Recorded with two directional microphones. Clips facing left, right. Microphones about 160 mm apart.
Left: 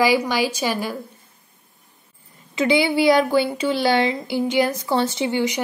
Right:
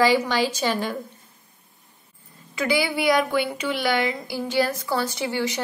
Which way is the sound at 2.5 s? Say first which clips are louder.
Left 5 dB; 25° left (ahead or behind).